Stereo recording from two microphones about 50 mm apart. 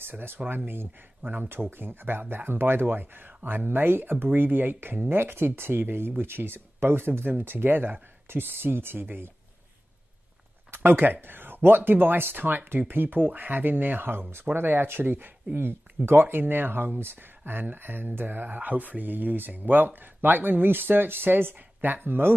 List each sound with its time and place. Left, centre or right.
0.0 s speech: right
10.7 s speech: right